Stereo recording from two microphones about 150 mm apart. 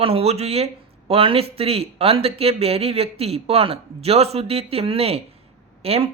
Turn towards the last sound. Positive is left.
turn(degrees=-40)  # may be behind; listen again after turning